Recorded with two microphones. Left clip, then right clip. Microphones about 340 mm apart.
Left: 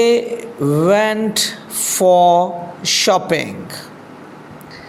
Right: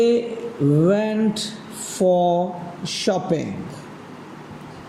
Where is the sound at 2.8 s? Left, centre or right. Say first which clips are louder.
Left 9 dB; centre.